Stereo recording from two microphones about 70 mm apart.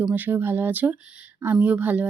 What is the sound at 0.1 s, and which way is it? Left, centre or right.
Speech, right.